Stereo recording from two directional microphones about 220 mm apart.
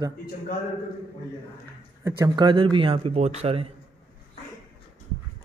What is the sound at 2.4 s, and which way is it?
Speech, 20° right (ahead or behind).